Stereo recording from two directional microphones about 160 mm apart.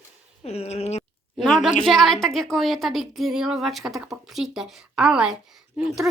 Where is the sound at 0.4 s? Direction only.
40° left (ahead or behind).